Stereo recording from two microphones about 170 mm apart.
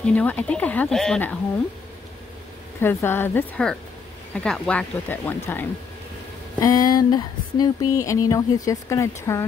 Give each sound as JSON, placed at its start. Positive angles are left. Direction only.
{"t": 0.0, "sound": "speech", "side_deg": 10}
{"t": 2.8, "sound": "speech", "side_deg": 15}
{"t": 6.6, "sound": "speech", "side_deg": 20}